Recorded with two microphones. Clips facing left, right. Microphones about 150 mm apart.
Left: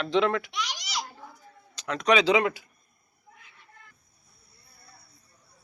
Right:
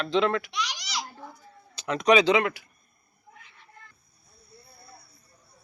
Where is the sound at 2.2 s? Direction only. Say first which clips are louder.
Even; 15° left (ahead or behind).